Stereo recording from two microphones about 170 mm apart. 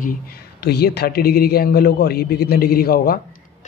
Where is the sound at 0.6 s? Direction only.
70° left (ahead or behind).